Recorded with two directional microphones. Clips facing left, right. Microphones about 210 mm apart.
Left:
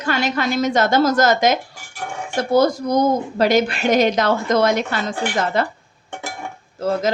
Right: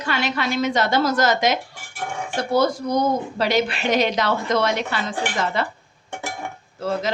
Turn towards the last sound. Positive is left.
turn(degrees=45)  # may be behind; listen again after turning